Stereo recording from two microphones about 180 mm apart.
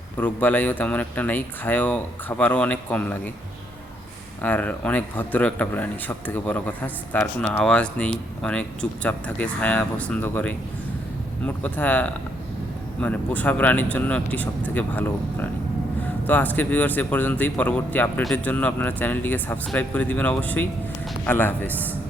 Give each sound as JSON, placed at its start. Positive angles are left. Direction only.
{"t": 0.2, "sound": "speech", "side_deg": 10}
{"t": 4.4, "sound": "speech", "side_deg": 10}